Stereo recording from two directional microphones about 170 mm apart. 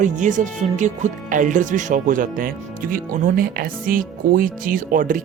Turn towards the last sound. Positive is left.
turn(degrees=-55)  # may be behind; listen again after turning